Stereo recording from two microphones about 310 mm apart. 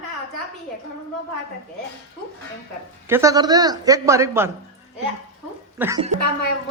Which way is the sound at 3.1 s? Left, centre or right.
Centre.